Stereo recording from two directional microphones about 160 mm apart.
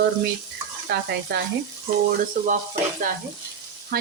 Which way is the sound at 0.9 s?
85° right.